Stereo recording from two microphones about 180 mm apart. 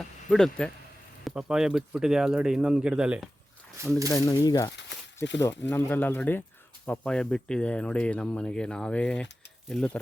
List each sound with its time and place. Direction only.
0.3 s speech: centre (ahead or behind)
4.1 s speech: 20° left (ahead or behind)